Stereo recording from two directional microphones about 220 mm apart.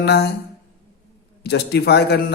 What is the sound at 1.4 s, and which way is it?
Speech, 50° left (ahead or behind).